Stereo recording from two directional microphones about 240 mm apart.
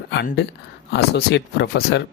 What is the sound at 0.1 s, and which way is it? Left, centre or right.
Speech, left.